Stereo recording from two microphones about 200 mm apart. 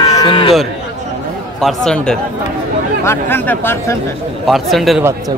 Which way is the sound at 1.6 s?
Centre (ahead or behind).